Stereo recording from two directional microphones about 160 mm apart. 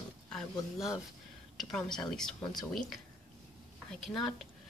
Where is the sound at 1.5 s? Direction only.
Centre (ahead or behind).